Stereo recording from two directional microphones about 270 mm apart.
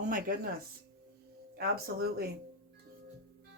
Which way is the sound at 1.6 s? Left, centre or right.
Right.